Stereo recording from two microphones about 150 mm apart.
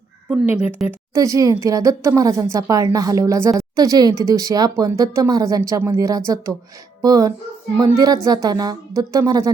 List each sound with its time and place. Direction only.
0.9 s a woman's voice: 20° right (ahead or behind)